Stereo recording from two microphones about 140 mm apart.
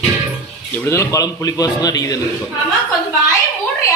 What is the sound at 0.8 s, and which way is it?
A man's voice, 20° left (ahead or behind).